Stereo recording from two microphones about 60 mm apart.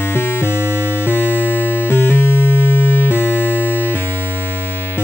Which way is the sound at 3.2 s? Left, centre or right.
Right.